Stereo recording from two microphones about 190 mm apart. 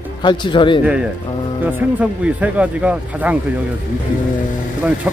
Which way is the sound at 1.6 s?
5° right (ahead or behind).